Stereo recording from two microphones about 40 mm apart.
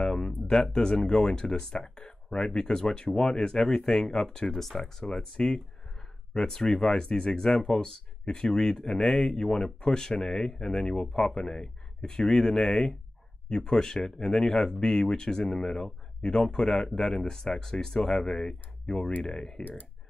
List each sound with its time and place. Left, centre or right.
0.0 s speech: centre